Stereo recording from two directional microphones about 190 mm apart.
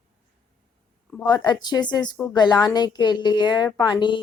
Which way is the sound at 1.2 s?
20° left (ahead or behind).